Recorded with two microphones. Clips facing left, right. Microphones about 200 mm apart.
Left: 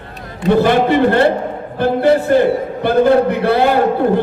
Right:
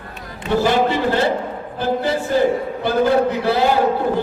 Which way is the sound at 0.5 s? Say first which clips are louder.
Left 4 dB; 60° left (ahead or behind).